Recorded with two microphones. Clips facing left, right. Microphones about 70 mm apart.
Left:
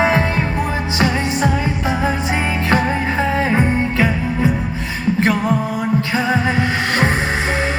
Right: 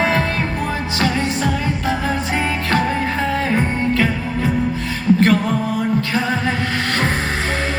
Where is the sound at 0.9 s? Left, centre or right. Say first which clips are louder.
Left 2 dB; left.